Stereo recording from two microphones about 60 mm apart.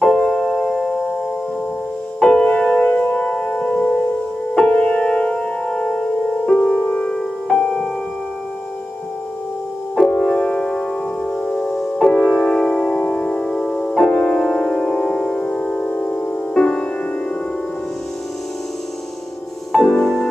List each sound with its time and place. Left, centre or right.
0.0 s music: centre
2.2 s music: centre
2.9 s music: left
7.2 s music: centre
9.9 s music: centre
13.8 s piano: centre
19.7 s music: centre